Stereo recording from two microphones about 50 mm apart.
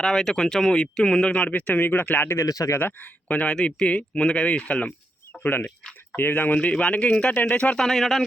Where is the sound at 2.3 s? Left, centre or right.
Left.